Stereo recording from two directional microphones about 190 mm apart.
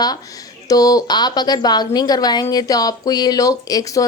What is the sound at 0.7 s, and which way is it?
A woman's voice, 20° left (ahead or behind).